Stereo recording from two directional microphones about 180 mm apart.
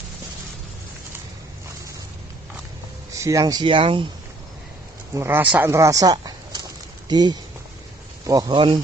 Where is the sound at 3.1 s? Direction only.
15° right (ahead or behind).